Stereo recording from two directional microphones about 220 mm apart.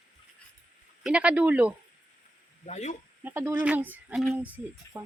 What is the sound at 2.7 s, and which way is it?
Speech, 30° left (ahead or behind).